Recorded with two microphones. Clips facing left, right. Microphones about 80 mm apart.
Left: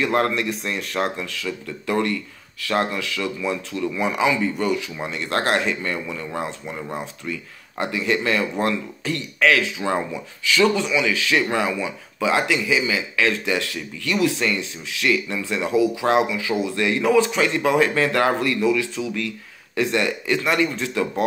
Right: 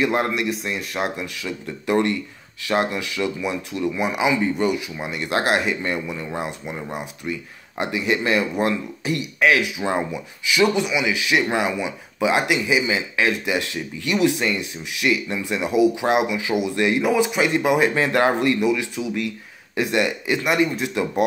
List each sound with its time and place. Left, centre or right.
0.0 s speech: centre